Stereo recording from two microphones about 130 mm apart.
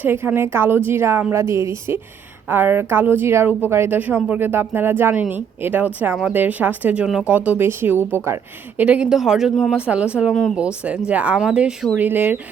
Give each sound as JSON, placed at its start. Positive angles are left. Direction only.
{"t": 0.0, "sound": "a woman's voice", "side_deg": -15}
{"t": 8.8, "sound": "a woman's voice", "side_deg": -10}